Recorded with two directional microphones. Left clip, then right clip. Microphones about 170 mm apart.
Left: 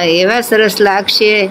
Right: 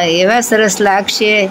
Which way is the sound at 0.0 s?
Centre (ahead or behind).